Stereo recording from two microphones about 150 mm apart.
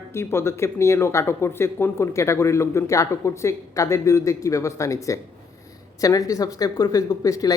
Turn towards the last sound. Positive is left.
turn(degrees=25)  # may be behind; listen again after turning